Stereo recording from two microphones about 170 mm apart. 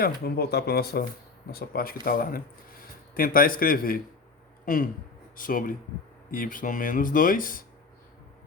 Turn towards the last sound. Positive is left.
turn(degrees=55)  # may be behind; listen again after turning